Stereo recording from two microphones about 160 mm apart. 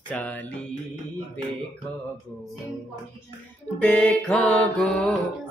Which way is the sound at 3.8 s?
10° left (ahead or behind).